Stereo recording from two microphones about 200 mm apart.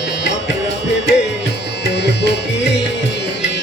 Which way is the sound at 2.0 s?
60° left (ahead or behind).